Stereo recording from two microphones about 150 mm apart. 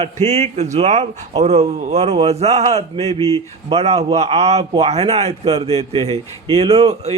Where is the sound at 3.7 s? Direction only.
45° right (ahead or behind).